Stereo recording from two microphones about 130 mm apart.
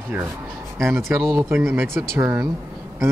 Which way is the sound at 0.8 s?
20° right (ahead or behind).